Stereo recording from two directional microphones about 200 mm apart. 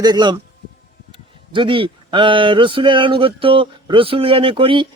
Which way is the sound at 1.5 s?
25° right (ahead or behind).